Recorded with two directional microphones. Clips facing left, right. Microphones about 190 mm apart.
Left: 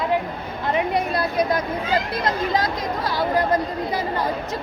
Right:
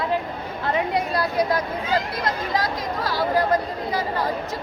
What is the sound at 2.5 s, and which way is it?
Speech, 20° left (ahead or behind).